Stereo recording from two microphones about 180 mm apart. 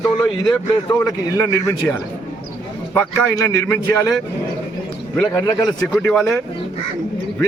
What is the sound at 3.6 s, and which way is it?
Speech, 15° left (ahead or behind).